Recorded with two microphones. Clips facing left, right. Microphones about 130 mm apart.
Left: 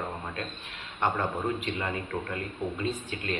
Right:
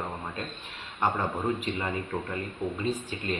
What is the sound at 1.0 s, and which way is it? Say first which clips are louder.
Speech: even; 15° right (ahead or behind).